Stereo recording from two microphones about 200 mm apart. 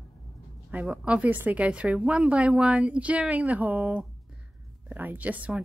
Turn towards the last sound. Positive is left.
turn(degrees=-5)  # may be behind; listen again after turning